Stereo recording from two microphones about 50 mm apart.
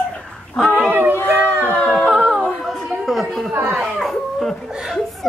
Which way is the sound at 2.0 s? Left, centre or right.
Centre.